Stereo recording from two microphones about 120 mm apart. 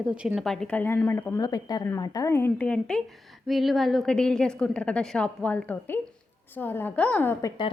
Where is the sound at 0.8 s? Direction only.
15° left (ahead or behind).